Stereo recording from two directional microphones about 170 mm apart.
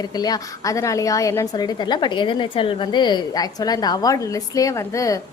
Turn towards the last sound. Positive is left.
turn(degrees=20)  # may be behind; listen again after turning